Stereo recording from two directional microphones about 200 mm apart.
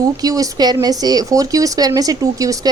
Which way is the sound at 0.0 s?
20° right (ahead or behind).